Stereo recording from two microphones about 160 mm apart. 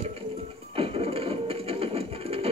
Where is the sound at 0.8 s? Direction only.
35° right (ahead or behind).